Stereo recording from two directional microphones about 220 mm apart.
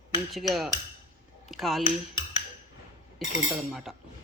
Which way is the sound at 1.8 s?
20° left (ahead or behind).